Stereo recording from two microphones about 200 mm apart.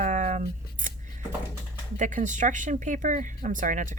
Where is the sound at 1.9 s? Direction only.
40° right (ahead or behind).